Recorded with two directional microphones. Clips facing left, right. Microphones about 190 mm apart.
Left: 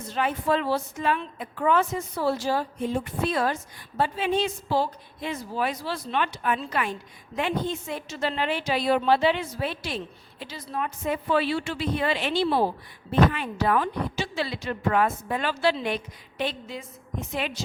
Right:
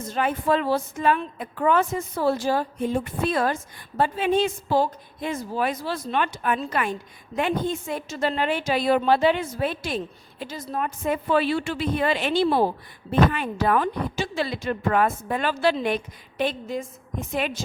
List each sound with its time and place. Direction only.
0.0 s a woman's voice: 45° right (ahead or behind)